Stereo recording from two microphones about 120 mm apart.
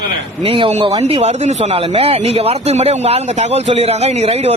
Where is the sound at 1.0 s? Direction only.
65° right (ahead or behind).